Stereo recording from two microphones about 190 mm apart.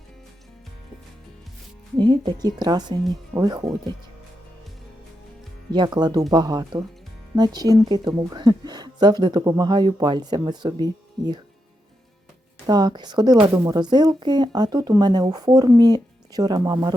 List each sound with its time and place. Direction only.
2.0 s speech: 25° right (ahead or behind)
5.7 s speech: 20° right (ahead or behind)
12.6 s speech: 20° right (ahead or behind)